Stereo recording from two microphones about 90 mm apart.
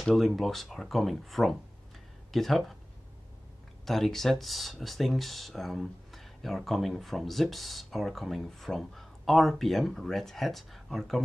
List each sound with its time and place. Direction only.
0.0 s speech: centre (ahead or behind)
3.8 s speech: 5° left (ahead or behind)